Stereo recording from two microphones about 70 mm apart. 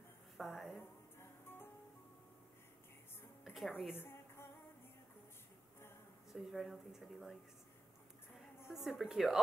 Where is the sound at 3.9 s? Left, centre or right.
Left.